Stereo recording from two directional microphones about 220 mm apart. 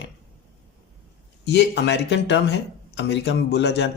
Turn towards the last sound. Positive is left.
turn(degrees=50)  # may be behind; listen again after turning